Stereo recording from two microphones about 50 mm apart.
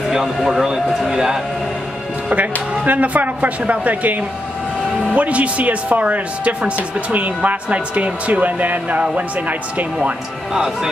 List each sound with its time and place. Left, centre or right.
0.1 s speech: centre
2.2 s speech: right